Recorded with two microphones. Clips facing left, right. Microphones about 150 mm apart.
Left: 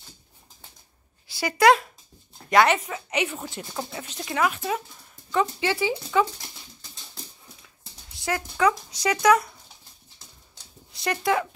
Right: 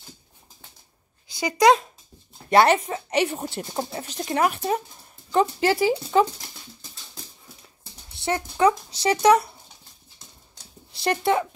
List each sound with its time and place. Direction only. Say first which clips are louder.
1.3 s speech: right 1 dB; 20° right (ahead or behind)
2.5 s speech: right 2 dB; 35° right (ahead or behind)
4.2 s speech: right 3 dB; 40° right (ahead or behind)
8.2 s speech: right 3 dB; 25° right (ahead or behind)
10.9 s speech: right 3 dB; 30° right (ahead or behind)